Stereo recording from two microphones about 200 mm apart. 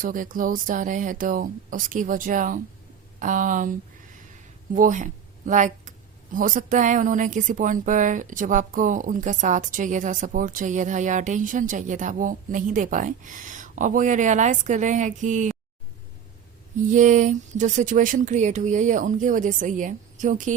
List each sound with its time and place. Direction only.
0.0 s speech: 40° right (ahead or behind)
16.9 s speech: 40° right (ahead or behind)